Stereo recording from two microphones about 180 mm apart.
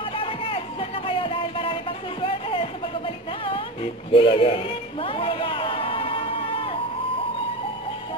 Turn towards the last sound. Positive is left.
turn(degrees=30)  # may be behind; listen again after turning